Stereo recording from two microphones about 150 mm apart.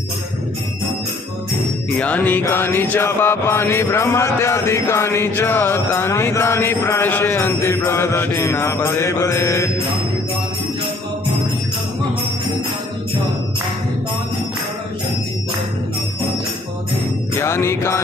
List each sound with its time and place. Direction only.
2.0 s mantra: 10° left (ahead or behind)
17.4 s mantra: 15° left (ahead or behind)